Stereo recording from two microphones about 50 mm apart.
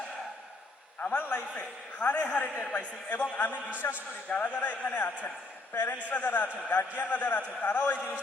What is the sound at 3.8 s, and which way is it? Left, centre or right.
Speech, left.